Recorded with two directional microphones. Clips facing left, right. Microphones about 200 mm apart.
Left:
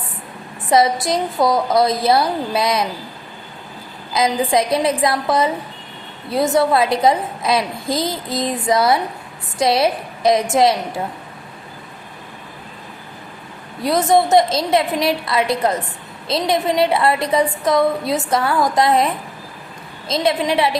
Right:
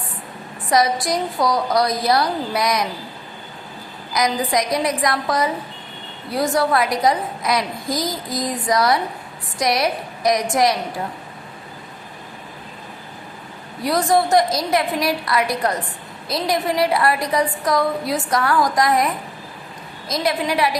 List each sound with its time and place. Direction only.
0.7 s a woman's voice: 25° left (ahead or behind)
4.1 s a woman's voice: 25° left (ahead or behind)
13.8 s a woman's voice: 20° left (ahead or behind)